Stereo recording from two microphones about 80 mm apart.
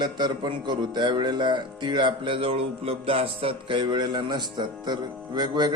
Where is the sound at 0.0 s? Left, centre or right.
Right.